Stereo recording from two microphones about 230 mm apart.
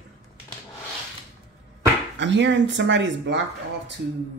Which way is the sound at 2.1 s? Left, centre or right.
Right.